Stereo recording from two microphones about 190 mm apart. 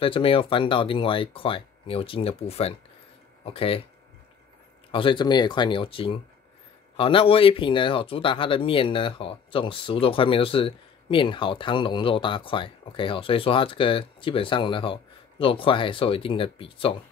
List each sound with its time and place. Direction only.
0.0 s speech: 30° left (ahead or behind)
4.9 s speech: 25° left (ahead or behind)